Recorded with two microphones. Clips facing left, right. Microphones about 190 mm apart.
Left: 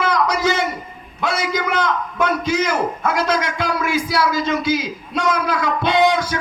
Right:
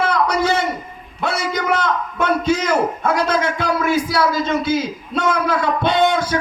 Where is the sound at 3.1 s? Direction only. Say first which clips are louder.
Right 1 dB; 55° right (ahead or behind).